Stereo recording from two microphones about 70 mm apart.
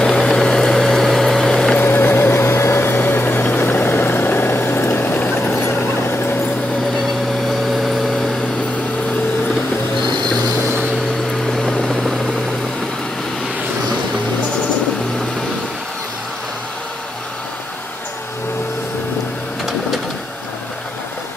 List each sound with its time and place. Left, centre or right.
0.0 s vehicle: centre
1.8 s a sound: left
7.4 s vehicle: centre
11.5 s vehicle: centre